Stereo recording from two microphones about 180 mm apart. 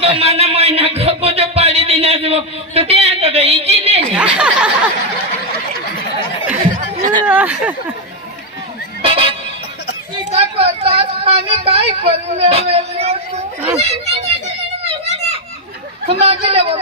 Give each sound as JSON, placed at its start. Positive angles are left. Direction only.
{"t": 0.0, "sound": "music", "side_deg": -35}
{"t": 4.1, "sound": "a sound", "side_deg": -5}
{"t": 6.5, "sound": "a sound", "side_deg": -45}
{"t": 7.2, "sound": "speech", "side_deg": -5}
{"t": 9.0, "sound": "music", "side_deg": -30}
{"t": 10.3, "sound": "speech", "side_deg": -30}
{"t": 16.1, "sound": "speech", "side_deg": -35}